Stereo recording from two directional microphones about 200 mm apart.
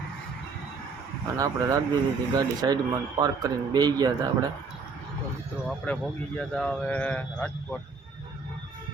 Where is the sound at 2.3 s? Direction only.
20° right (ahead or behind).